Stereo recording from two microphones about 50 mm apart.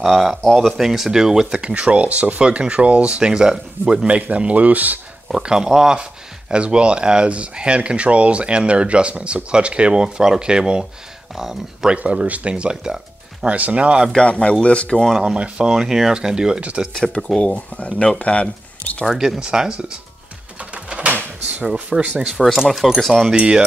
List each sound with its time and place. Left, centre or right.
0.0 s speech: centre
4.2 s speech: right
5.3 s speech: centre
11.9 s speech: right
14.1 s speech: left
15.3 s speech: right
15.7 s speech: centre
17.4 s speech: left
19.0 s speech: centre
19.4 s speech: centre
20.7 s a sound: right
22.2 s speech: centre
23.3 s speech: right